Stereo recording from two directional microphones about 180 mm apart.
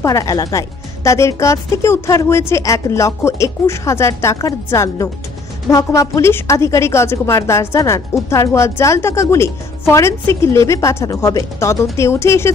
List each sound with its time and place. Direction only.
0.0 s a woman's voice: 20° left (ahead or behind)